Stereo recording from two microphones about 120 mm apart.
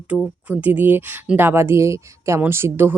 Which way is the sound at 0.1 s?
5° right (ahead or behind).